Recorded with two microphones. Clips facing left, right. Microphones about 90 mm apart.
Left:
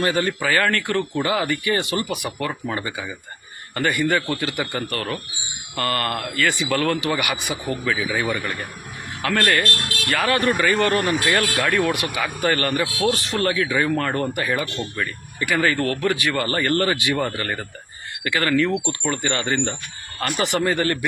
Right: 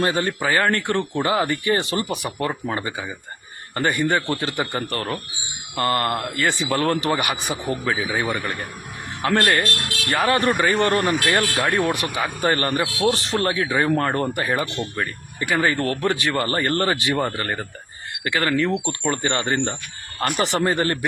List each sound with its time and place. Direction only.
0.0 s speech: 25° right (ahead or behind)
12.8 s speech: 5° right (ahead or behind)
13.2 s speech: 30° right (ahead or behind)
19.1 s speech: 30° right (ahead or behind)